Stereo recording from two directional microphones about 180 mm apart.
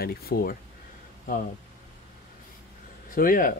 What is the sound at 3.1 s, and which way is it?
Speech, 50° left (ahead or behind).